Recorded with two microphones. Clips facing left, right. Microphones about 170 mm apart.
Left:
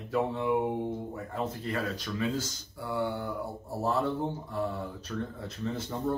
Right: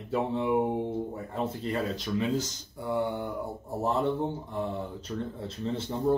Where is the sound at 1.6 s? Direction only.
25° right (ahead or behind).